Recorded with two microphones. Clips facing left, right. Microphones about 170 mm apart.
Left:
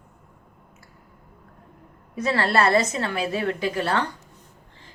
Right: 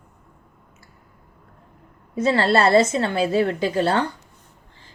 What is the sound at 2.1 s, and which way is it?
A woman's voice, 30° right (ahead or behind).